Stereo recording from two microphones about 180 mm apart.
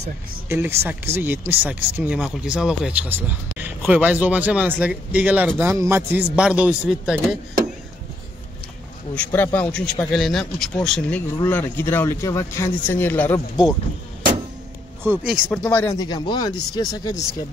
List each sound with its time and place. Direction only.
0.5 s speech: 10° right (ahead or behind)
9.1 s speech: 10° left (ahead or behind)
15.0 s speech: 10° right (ahead or behind)
15.4 s speech: 5° left (ahead or behind); by 17.3 s 20° left (ahead or behind)